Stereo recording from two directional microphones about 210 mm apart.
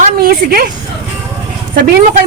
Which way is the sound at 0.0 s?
45° right (ahead or behind).